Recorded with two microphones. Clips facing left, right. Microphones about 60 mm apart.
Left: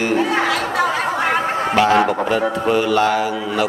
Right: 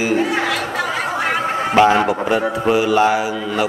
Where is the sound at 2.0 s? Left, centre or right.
Centre.